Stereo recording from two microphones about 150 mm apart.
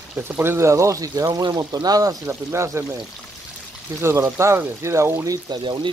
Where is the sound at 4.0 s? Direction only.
20° right (ahead or behind).